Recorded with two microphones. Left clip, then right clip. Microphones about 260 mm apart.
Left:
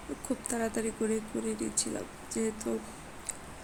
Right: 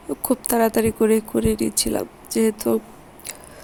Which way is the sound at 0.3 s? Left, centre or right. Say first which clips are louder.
Right 15 dB; right.